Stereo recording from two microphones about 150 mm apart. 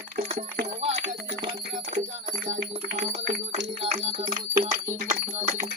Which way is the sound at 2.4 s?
50° right (ahead or behind).